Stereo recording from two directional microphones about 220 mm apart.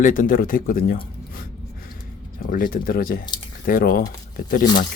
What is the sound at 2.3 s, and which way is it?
Speech, 40° left (ahead or behind).